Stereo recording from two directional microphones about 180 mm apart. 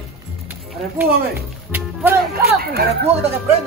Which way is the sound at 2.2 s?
60° right (ahead or behind).